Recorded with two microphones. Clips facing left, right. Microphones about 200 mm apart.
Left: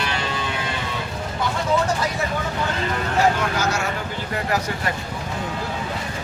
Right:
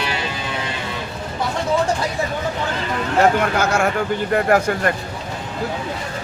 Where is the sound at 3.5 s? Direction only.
55° right (ahead or behind).